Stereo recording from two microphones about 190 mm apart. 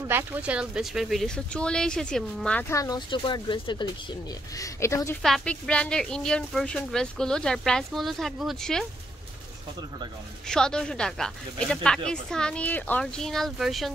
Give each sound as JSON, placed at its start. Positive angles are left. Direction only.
{"t": 0.1, "sound": "speech", "side_deg": -10}
{"t": 2.7, "sound": "speech", "side_deg": 20}
{"t": 5.2, "sound": "speech", "side_deg": 5}
{"t": 10.5, "sound": "speech", "side_deg": 5}